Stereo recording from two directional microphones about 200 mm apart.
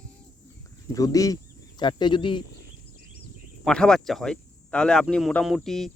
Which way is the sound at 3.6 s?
5° left (ahead or behind).